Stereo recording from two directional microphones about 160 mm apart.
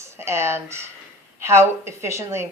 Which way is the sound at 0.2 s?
15° right (ahead or behind).